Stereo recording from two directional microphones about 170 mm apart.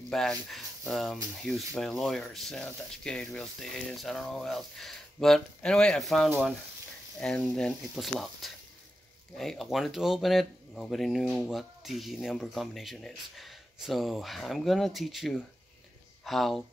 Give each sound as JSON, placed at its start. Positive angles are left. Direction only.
{"t": 0.1, "sound": "speech", "side_deg": 0}